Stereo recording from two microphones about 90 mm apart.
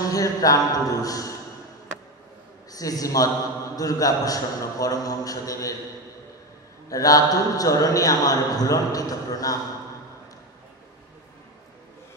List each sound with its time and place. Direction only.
0.1 s a man's voice: 40° left (ahead or behind)
2.7 s a man's voice: 40° left (ahead or behind)
6.9 s a man's voice: 40° left (ahead or behind)